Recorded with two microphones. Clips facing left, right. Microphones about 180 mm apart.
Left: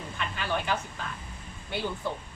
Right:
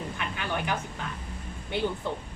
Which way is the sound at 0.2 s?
15° right (ahead or behind).